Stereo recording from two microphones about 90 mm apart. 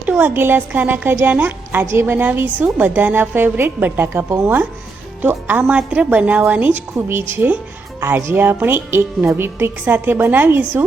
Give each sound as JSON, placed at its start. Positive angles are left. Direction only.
{"t": 0.0, "sound": "a woman's voice", "side_deg": -20}